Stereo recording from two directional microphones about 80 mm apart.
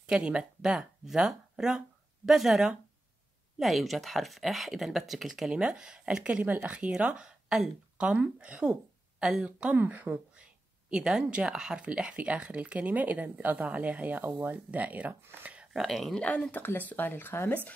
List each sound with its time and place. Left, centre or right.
0.0 s speech: centre
9.8 s speech: right
15.5 s a sound: centre
15.8 s speech: centre
16.3 s speech: centre